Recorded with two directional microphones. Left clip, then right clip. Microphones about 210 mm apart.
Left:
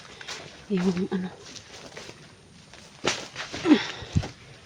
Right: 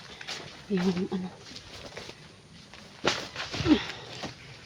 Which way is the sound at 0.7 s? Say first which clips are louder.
Left 2 dB; 25° left (ahead or behind).